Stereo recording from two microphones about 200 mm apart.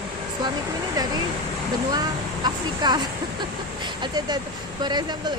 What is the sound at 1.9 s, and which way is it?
Speech, 20° right (ahead or behind).